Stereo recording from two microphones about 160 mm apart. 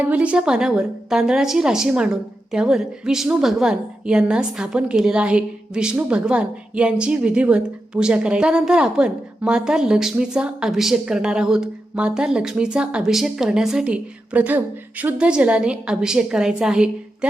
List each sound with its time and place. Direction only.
0.0 s a woman's voice: 10° right (ahead or behind)